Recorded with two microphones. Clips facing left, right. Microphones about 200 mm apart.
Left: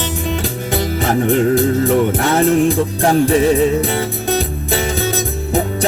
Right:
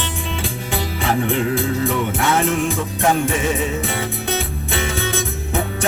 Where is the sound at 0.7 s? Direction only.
40° left (ahead or behind).